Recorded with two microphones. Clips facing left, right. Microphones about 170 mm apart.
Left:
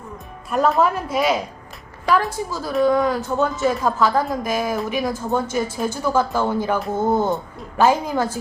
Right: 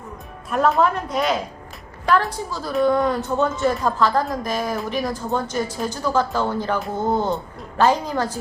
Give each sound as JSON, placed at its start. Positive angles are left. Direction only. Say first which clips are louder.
{"t": 0.5, "sound": "a woman's voice", "louder": "even", "side_deg": 0}